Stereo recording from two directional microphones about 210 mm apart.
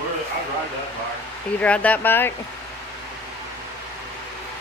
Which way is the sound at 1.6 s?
5° left (ahead or behind).